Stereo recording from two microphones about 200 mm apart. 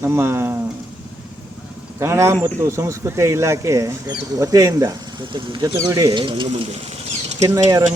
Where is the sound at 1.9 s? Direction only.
15° right (ahead or behind).